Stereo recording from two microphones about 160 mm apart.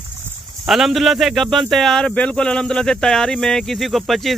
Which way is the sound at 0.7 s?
Centre (ahead or behind).